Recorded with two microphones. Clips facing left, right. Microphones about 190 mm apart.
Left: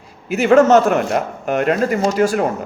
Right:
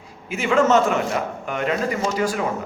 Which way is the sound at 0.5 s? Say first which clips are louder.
Left 6 dB; 70° left (ahead or behind).